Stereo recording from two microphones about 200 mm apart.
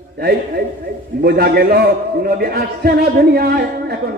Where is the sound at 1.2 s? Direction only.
50° right (ahead or behind).